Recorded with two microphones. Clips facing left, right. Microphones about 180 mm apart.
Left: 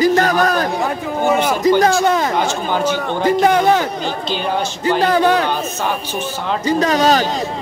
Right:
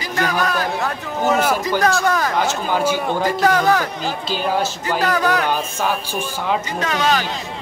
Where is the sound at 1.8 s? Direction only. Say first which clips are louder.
Left 3 dB; 25° left (ahead or behind).